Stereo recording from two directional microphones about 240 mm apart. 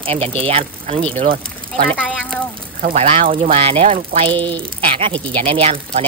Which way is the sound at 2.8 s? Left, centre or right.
Right.